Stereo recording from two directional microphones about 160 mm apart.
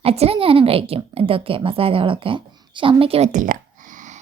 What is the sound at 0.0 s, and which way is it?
Speech, 40° right (ahead or behind).